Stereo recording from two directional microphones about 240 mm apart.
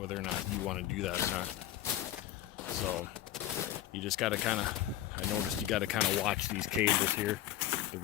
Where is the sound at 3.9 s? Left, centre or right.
Centre.